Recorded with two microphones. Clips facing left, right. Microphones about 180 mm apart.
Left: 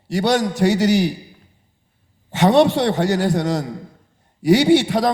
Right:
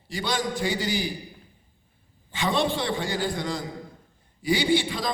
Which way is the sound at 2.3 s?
75° left (ahead or behind).